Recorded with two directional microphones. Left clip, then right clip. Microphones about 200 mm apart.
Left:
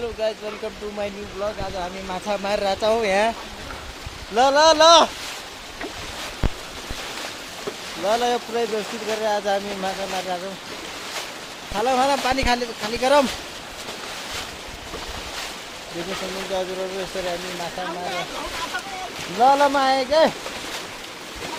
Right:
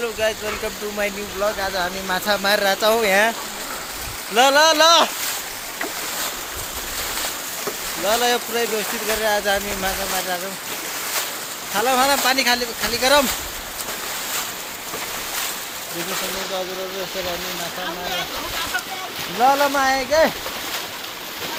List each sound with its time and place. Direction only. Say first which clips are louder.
0.2 s speech: right 3 dB; 5° left (ahead or behind)
2.2 s speech: right 4 dB; 5° left (ahead or behind)
4.4 s speech: right 1 dB; 5° left (ahead or behind)
8.0 s speech: right 2 dB; 10° left (ahead or behind)
11.8 s speech: right 2 dB; 15° left (ahead or behind)
19.4 s speech: even; 20° left (ahead or behind)